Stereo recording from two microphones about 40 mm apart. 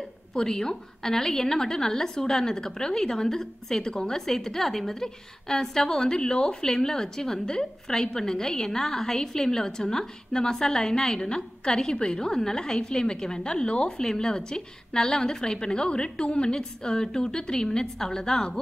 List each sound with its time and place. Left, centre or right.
0.3 s a woman's voice: centre